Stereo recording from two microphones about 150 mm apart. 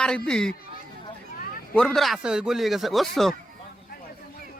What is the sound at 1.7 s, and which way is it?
Speech, 5° left (ahead or behind).